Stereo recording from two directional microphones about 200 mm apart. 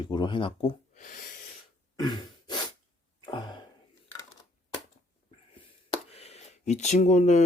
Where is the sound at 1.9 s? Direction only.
20° left (ahead or behind).